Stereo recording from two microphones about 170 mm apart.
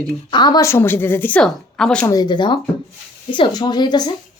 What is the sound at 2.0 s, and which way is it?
Speech, 20° left (ahead or behind).